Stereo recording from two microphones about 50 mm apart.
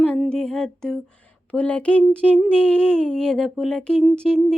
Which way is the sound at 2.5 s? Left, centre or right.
Centre.